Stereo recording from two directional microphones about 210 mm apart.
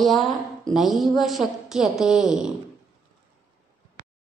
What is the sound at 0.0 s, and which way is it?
A woman's voice, centre (ahead or behind).